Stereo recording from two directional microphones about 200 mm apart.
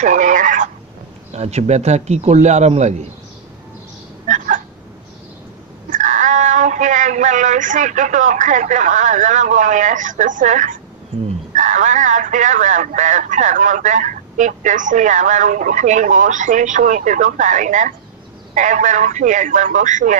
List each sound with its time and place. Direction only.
0.0 s a sound: 40° right (ahead or behind)
1.3 s speech: 35° right (ahead or behind)
5.9 s speech: 40° right (ahead or behind)